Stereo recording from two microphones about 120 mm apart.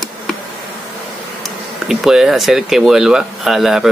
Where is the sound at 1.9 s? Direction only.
5° right (ahead or behind).